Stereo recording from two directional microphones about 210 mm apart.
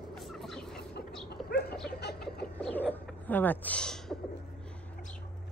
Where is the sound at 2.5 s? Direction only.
5° left (ahead or behind).